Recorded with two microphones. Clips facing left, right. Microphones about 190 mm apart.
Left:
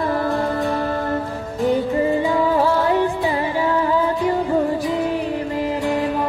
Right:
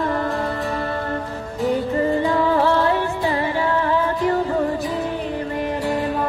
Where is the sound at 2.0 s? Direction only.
10° left (ahead or behind).